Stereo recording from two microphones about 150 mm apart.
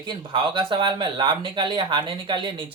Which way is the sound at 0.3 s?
30° right (ahead or behind).